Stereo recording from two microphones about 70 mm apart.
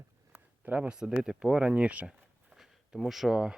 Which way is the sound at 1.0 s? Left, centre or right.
Centre.